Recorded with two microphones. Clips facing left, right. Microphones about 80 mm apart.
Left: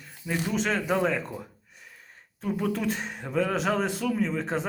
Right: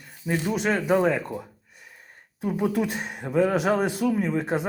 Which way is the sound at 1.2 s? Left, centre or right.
Centre.